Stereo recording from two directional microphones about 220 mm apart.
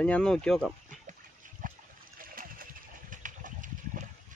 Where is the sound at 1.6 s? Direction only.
35° right (ahead or behind).